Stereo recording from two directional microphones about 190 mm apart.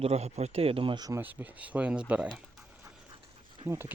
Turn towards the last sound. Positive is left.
turn(degrees=-10)  # may be behind; listen again after turning